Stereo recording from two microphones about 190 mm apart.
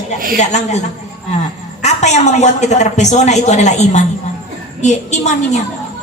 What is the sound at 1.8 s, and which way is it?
A woman's voice, 35° left (ahead or behind).